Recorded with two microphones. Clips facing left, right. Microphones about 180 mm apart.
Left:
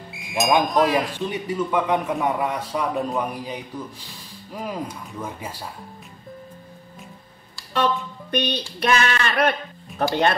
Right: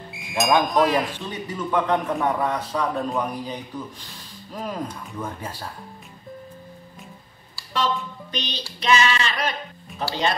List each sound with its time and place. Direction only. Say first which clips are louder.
0.1 s speech: even; centre (ahead or behind)
1.3 s speech: left 1 dB; 10° left (ahead or behind)
7.7 s speech: left 2 dB; 60° left (ahead or behind)